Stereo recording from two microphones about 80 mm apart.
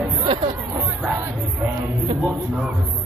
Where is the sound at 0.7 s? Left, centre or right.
Right.